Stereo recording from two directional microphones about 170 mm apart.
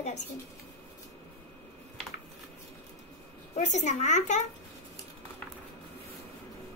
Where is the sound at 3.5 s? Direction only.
45° left (ahead or behind).